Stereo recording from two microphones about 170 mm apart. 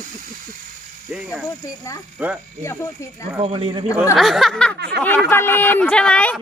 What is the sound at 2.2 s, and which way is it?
Speech, 10° right (ahead or behind).